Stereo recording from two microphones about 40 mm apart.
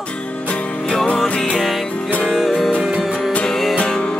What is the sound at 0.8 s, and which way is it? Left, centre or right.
Music, centre.